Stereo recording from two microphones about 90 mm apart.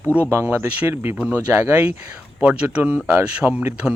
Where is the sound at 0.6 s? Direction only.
15° right (ahead or behind).